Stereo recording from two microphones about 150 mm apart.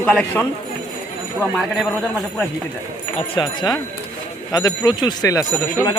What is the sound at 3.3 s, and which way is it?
Speech, 30° left (ahead or behind).